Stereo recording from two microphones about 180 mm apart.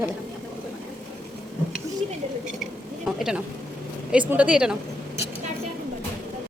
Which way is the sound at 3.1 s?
5° right (ahead or behind).